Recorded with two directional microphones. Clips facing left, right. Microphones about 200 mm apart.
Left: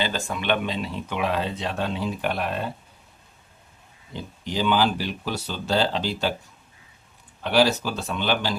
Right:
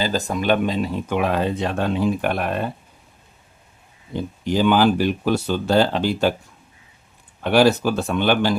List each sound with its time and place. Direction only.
0.0 s speech: 40° right (ahead or behind)
4.1 s speech: 50° right (ahead or behind)
7.4 s speech: 55° right (ahead or behind)